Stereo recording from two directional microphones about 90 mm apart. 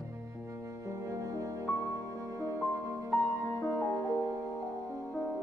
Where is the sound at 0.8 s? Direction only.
35° right (ahead or behind).